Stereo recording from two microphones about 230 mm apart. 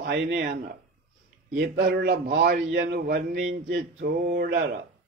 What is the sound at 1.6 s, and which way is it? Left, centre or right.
A man's voice, right.